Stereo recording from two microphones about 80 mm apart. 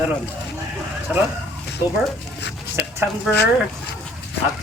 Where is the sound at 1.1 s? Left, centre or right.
Centre.